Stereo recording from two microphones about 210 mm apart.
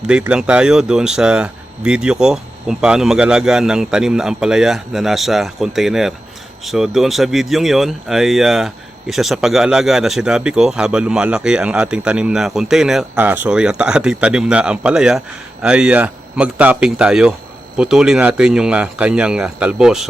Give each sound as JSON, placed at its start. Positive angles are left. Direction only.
{"t": 0.1, "sound": "speech", "side_deg": -5}